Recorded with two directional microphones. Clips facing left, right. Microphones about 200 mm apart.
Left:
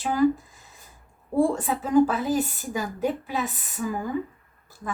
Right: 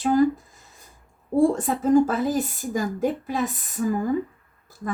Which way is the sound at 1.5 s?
45° right (ahead or behind).